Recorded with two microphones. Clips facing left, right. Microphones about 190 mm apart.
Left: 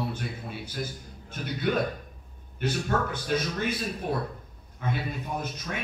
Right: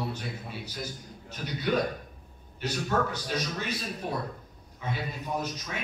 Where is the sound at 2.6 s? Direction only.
50° left (ahead or behind).